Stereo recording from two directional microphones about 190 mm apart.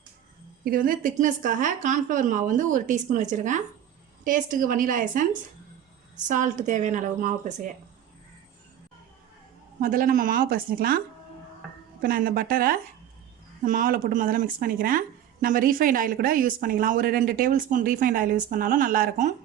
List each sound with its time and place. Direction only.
0.6 s a woman's voice: 50° right (ahead or behind)
9.8 s speech: 45° right (ahead or behind)
12.0 s speech: 50° right (ahead or behind)